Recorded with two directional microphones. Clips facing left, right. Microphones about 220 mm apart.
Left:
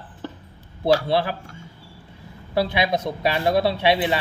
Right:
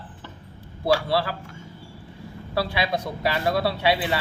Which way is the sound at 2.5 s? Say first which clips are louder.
Left 4 dB; 20° left (ahead or behind).